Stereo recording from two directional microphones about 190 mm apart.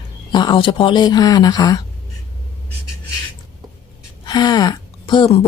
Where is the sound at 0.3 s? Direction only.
25° left (ahead or behind).